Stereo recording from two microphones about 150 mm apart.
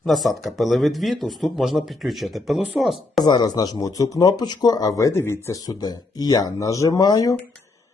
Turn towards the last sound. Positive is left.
turn(degrees=25)  # may be behind; listen again after turning